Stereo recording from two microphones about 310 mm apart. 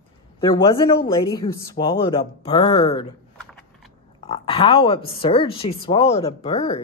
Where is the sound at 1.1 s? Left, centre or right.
Centre.